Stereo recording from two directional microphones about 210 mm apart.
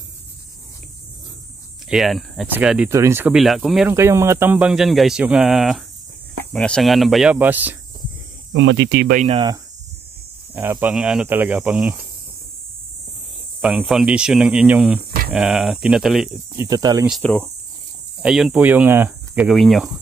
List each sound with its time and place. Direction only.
1.9 s speech: centre (ahead or behind)
3.9 s speech: 15° right (ahead or behind)
8.5 s speech: 60° right (ahead or behind)
9.1 s speech: 35° right (ahead or behind)
10.5 s speech: 10° right (ahead or behind)
13.6 s speech: 5° right (ahead or behind)
15.0 s a sound: 45° right (ahead or behind)
15.3 s speech: 5° right (ahead or behind)
16.5 s speech: 15° right (ahead or behind)
17.2 s speech: 5° left (ahead or behind)